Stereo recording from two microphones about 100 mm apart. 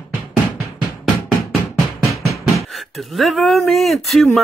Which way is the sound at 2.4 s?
Centre (ahead or behind).